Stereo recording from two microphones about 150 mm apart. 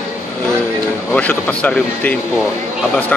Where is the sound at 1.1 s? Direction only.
10° left (ahead or behind).